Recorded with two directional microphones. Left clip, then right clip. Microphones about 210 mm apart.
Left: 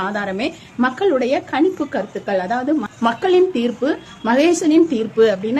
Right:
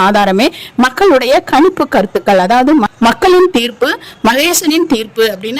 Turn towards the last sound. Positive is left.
turn(degrees=-50)  # may be behind; listen again after turning